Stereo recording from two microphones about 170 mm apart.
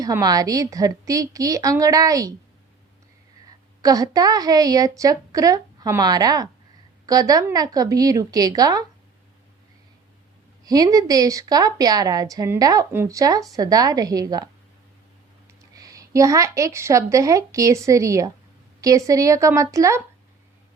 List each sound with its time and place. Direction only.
0.0 s a woman's voice: 20° right (ahead or behind)
3.8 s a woman's voice: 20° right (ahead or behind)
10.6 s a woman's voice: 20° right (ahead or behind)